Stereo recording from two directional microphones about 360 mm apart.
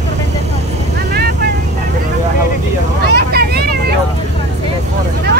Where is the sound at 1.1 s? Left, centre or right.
Right.